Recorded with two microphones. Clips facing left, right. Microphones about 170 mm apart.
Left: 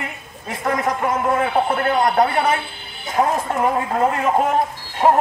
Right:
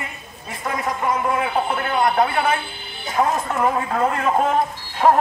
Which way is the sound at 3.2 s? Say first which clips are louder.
Left 1 dB; 20° left (ahead or behind).